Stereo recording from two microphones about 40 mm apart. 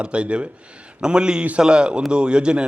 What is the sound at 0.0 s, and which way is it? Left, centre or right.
A man's voice, right.